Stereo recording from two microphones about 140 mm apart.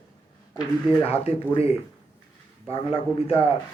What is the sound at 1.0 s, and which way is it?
Speech, 45° left (ahead or behind).